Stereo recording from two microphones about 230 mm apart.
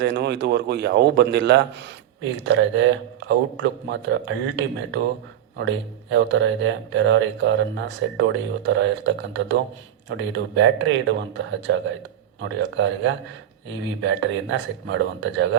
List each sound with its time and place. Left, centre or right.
0.0 s speech: right
12.4 s speech: right